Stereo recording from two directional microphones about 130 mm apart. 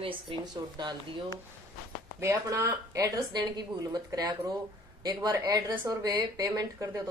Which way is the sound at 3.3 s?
35° right (ahead or behind).